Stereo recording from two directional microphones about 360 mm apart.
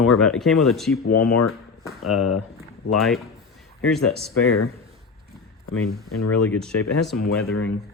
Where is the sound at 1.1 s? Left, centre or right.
Left.